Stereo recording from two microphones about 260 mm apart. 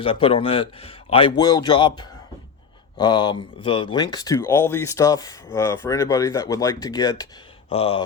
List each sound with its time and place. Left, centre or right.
0.0 s a man's voice: left